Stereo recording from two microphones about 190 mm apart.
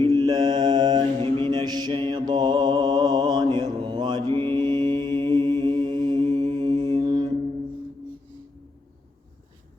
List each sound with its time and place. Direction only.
0.2 s mantra: 20° right (ahead or behind)